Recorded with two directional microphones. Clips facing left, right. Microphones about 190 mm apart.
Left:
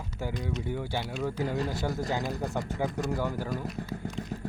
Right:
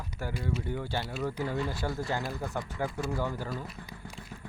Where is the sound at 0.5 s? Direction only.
Centre (ahead or behind).